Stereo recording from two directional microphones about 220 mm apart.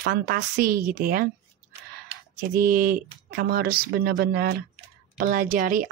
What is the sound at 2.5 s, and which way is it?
A woman's voice, 40° right (ahead or behind).